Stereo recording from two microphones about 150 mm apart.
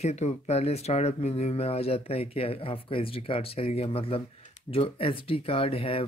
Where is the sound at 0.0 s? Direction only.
50° left (ahead or behind).